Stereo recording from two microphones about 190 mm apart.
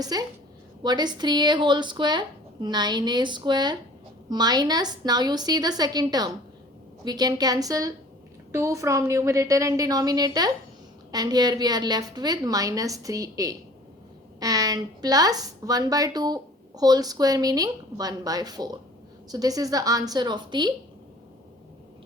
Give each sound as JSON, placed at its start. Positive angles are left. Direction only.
{"t": 0.0, "sound": "a woman's voice", "side_deg": -20}